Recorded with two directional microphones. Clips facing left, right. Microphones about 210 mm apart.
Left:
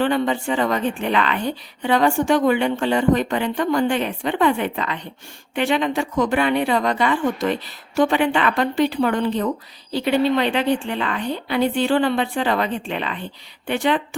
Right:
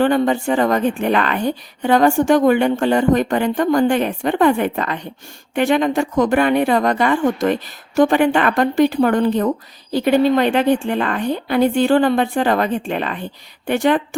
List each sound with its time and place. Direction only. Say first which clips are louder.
0.0 s a woman's voice: right 4 dB; 45° right (ahead or behind)